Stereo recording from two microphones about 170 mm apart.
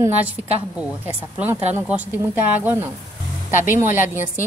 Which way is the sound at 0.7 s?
10° right (ahead or behind).